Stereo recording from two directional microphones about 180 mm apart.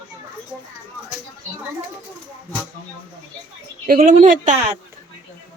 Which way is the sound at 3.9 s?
50° right (ahead or behind).